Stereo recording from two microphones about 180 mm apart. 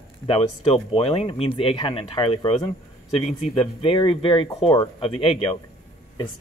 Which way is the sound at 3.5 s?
30° left (ahead or behind).